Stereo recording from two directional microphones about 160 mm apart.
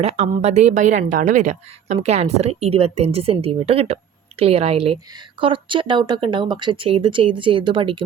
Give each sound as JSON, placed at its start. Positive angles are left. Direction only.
{"t": 0.0, "sound": "a woman's voice", "side_deg": -40}